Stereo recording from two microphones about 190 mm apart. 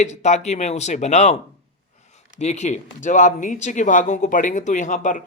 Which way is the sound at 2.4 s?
40° left (ahead or behind).